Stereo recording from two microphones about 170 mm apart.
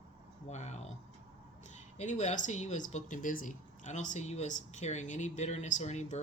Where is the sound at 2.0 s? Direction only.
45° left (ahead or behind).